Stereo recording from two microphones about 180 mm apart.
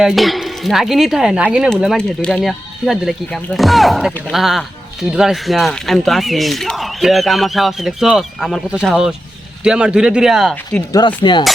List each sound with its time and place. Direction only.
0.0 s speech: centre (ahead or behind)
10.5 s speech: 10° left (ahead or behind)
11.2 s speech: 25° left (ahead or behind)